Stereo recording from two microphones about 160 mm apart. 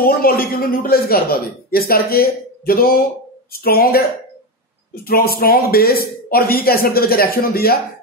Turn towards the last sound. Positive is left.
turn(degrees=70)  # may be behind; listen again after turning